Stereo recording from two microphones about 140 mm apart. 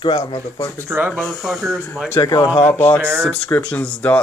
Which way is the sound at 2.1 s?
25° left (ahead or behind).